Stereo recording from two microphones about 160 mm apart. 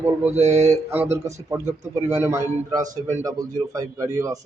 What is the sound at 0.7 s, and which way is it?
A man's voice, 15° right (ahead or behind).